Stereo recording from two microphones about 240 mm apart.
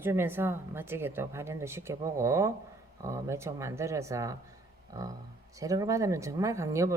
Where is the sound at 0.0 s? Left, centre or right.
Centre.